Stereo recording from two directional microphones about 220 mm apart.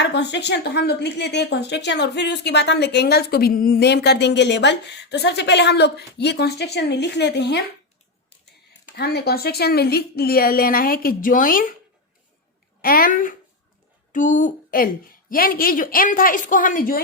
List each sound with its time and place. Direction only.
0.0 s a woman's voice: 50° left (ahead or behind)
9.0 s a woman's voice: 45° left (ahead or behind)
12.8 s a woman's voice: 40° left (ahead or behind)